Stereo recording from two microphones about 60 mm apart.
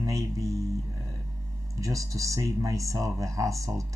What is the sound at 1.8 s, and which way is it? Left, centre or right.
Speech, right.